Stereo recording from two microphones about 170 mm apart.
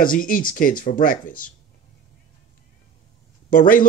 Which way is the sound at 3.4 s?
55° left (ahead or behind).